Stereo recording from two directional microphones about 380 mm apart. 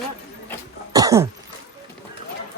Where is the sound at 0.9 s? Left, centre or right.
Centre.